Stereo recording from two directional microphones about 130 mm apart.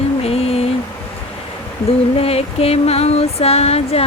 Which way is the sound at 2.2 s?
50° left (ahead or behind).